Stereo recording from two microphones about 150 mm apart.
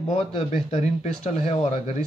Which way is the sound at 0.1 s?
45° left (ahead or behind).